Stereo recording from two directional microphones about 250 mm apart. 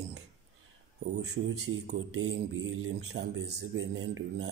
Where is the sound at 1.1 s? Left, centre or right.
Right.